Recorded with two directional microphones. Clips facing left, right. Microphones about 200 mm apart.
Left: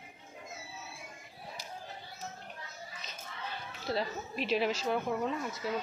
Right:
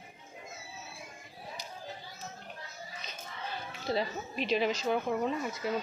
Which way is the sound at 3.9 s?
Centre (ahead or behind).